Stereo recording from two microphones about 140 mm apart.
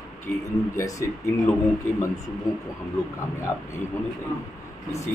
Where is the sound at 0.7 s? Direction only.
25° left (ahead or behind).